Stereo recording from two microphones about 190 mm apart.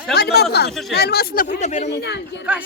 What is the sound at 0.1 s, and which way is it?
Speech, 55° left (ahead or behind).